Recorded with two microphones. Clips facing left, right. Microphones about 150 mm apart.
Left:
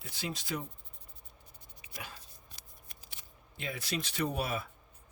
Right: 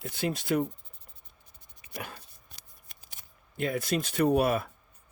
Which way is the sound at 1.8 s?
55° right (ahead or behind).